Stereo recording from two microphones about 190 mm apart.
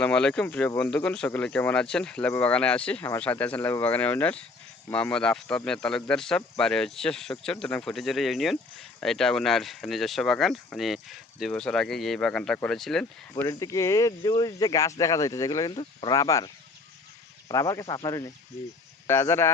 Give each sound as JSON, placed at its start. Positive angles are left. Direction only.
{"t": 0.0, "sound": "speech", "side_deg": 5}
{"t": 13.3, "sound": "speech", "side_deg": 15}
{"t": 17.5, "sound": "speech", "side_deg": 15}